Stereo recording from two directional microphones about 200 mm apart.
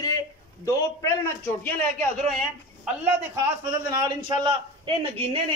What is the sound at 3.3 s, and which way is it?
A man's voice, 15° right (ahead or behind).